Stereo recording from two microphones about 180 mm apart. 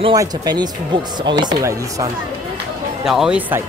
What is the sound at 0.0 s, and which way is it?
Speech, 20° right (ahead or behind).